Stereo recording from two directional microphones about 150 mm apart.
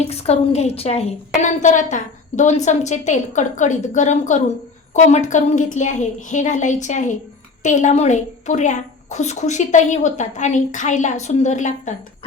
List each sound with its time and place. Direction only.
0.1 s a woman's voice: 45° left (ahead or behind)